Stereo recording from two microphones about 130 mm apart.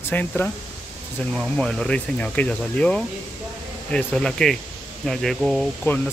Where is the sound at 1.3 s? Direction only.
5° left (ahead or behind).